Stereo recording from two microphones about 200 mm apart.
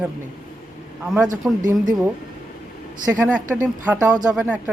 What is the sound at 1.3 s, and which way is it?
Speech, 40° right (ahead or behind).